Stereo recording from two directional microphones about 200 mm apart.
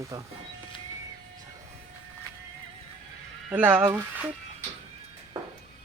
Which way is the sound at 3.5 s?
10° right (ahead or behind).